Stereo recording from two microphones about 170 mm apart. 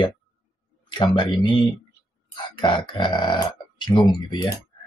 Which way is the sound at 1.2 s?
30° left (ahead or behind).